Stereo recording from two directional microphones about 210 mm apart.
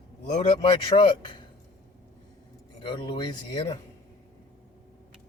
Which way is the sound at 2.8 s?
25° left (ahead or behind).